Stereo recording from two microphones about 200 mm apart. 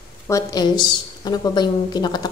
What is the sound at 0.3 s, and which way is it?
Speech, 20° left (ahead or behind).